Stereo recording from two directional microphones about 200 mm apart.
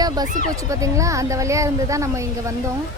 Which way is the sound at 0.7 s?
15° right (ahead or behind).